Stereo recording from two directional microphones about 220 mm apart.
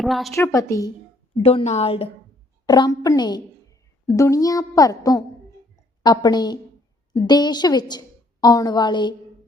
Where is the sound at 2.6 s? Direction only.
20° left (ahead or behind).